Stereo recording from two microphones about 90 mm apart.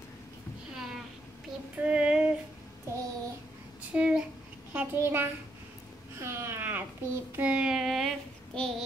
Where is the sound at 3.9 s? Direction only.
10° right (ahead or behind).